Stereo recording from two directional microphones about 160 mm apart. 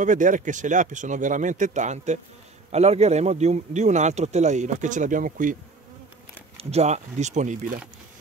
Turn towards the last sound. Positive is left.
turn(degrees=-50)  # may be behind; listen again after turning